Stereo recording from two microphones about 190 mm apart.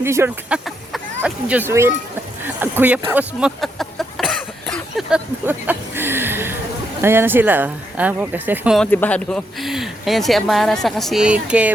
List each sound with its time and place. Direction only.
0.0 s speech: 15° right (ahead or behind)
8.9 s speech: 10° left (ahead or behind)